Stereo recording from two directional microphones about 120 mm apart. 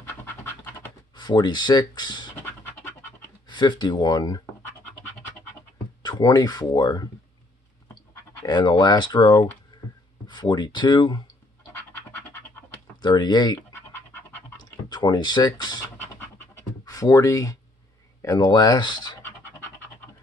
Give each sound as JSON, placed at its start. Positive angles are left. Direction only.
{"t": 0.0, "sound": "scratch", "side_deg": 20}
{"t": 1.1, "sound": "speech", "side_deg": 35}
{"t": 2.4, "sound": "scratch", "side_deg": 15}
{"t": 3.4, "sound": "speech", "side_deg": 40}
{"t": 6.0, "sound": "speech", "side_deg": 35}
{"t": 8.5, "sound": "speech", "side_deg": 40}
{"t": 13.0, "sound": "speech", "side_deg": 35}
{"t": 13.7, "sound": "scratch", "side_deg": 20}
{"t": 14.9, "sound": "speech", "side_deg": 35}
{"t": 16.8, "sound": "speech", "side_deg": 30}